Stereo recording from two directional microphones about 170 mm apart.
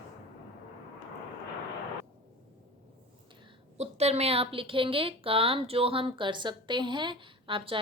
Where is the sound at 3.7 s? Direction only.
40° right (ahead or behind).